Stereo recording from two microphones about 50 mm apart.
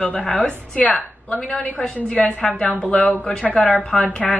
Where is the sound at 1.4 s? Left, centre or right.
Centre.